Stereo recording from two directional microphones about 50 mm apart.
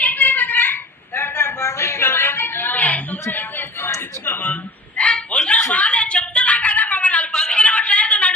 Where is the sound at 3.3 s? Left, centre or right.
Left.